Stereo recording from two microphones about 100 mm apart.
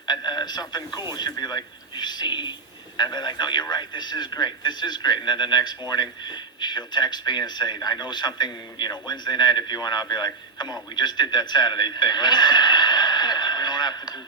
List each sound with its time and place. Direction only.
0.0 s radio: 45° left (ahead or behind)
0.9 s speech: 45° left (ahead or behind)